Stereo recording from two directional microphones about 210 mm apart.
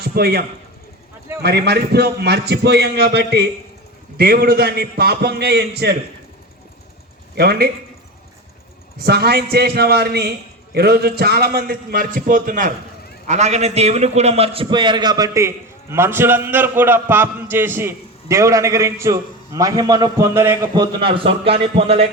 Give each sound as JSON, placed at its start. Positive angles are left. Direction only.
{"t": 0.0, "sound": "a man's voice", "side_deg": -50}
{"t": 7.3, "sound": "a man's voice", "side_deg": -50}
{"t": 9.0, "sound": "a man's voice", "side_deg": -50}